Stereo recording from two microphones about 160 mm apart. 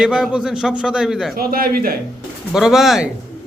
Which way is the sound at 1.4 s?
70° right (ahead or behind).